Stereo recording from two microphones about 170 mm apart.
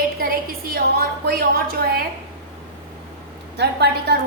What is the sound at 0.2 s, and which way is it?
A woman's voice, 65° right (ahead or behind).